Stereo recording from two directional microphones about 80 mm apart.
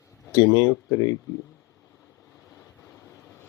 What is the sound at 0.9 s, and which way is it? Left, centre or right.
Speech, left.